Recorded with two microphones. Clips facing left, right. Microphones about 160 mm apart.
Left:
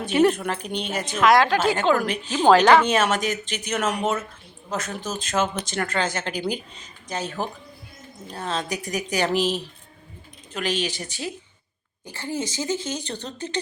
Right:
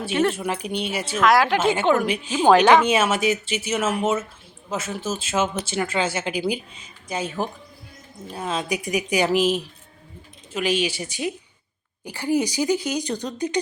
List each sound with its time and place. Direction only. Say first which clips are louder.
0.1 s speech: left 3 dB; 10° left (ahead or behind)
0.3 s a woman's voice: right 2 dB; 5° right (ahead or behind)
1.5 s a woman's voice: right 1 dB; 20° right (ahead or behind)
2.0 s speech: even; 10° right (ahead or behind)